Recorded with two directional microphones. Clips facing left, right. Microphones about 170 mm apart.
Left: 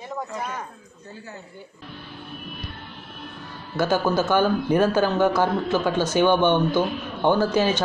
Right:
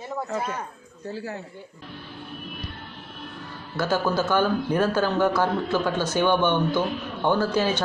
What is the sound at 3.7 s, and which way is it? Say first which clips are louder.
A man's voice: left 2 dB; 15° left (ahead or behind).